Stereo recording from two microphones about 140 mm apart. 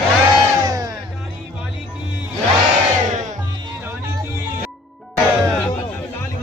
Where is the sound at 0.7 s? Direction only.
25° right (ahead or behind).